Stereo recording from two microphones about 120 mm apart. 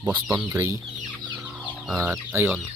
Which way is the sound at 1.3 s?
10° right (ahead or behind).